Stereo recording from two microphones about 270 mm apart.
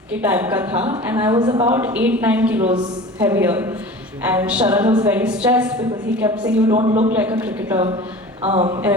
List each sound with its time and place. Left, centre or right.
0.1 s a woman's voice: centre
6.7 s a man's voice: right
7.1 s a woman's voice: centre
8.4 s a man's voice: right